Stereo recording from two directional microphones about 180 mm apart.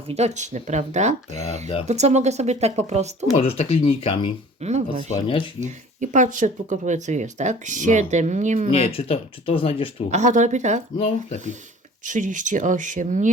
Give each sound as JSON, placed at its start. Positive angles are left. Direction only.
{"t": 0.1, "sound": "speech", "side_deg": -40}
{"t": 3.3, "sound": "speech", "side_deg": 35}
{"t": 4.6, "sound": "speech", "side_deg": -40}
{"t": 8.7, "sound": "speech", "side_deg": 30}
{"t": 10.1, "sound": "speech", "side_deg": -40}
{"t": 10.9, "sound": "speech", "side_deg": 35}
{"t": 12.0, "sound": "speech", "side_deg": -45}